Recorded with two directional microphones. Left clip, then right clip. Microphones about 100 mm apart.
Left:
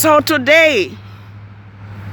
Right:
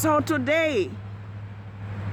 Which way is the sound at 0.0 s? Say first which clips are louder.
Left 11 dB; 50° left (ahead or behind).